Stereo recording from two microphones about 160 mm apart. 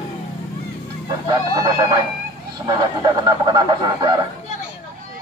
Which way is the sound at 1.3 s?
20° right (ahead or behind).